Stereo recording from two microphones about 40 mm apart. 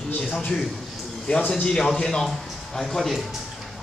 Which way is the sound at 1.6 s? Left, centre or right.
Centre.